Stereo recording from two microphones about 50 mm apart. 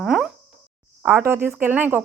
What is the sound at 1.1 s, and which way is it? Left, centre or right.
Speech, right.